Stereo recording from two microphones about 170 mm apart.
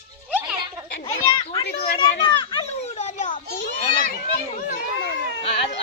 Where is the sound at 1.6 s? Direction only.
65° left (ahead or behind).